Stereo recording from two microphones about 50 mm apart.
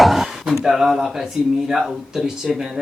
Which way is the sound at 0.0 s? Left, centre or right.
Centre.